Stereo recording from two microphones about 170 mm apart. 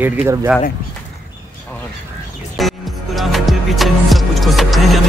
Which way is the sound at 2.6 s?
Centre (ahead or behind).